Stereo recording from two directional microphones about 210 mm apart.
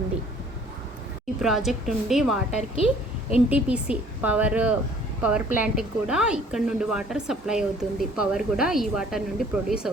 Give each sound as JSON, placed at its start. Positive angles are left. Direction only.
{"t": 1.4, "sound": "a woman's voice", "side_deg": 0}
{"t": 2.5, "sound": "a woman's voice", "side_deg": 30}
{"t": 3.2, "sound": "a woman's voice", "side_deg": -5}